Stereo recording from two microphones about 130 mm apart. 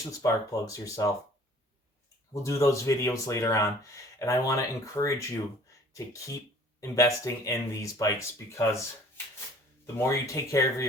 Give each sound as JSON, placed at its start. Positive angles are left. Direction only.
{"t": 0.2, "sound": "speech", "side_deg": 25}
{"t": 2.3, "sound": "speech", "side_deg": 25}
{"t": 9.8, "sound": "speech", "side_deg": 25}